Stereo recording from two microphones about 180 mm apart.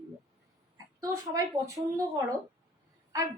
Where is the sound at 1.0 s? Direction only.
20° right (ahead or behind).